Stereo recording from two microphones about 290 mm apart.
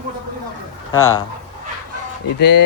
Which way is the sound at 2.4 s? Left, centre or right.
Left.